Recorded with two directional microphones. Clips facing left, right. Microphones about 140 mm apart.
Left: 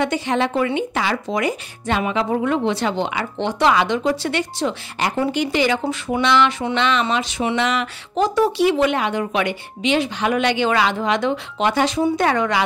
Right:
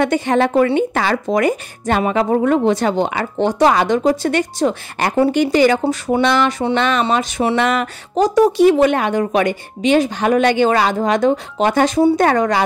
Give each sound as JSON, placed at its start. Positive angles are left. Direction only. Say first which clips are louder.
{"t": 0.0, "sound": "speech", "louder": "right 5 dB", "side_deg": -50}